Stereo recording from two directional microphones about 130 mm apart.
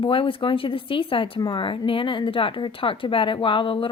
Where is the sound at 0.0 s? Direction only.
40° left (ahead or behind).